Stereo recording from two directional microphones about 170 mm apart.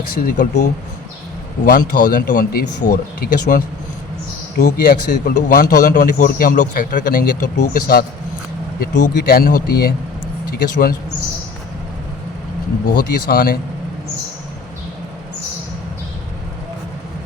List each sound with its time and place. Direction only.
0.1 s a man's voice: 55° left (ahead or behind)
9.0 s a man's voice: 60° left (ahead or behind)
12.9 s a man's voice: 60° left (ahead or behind)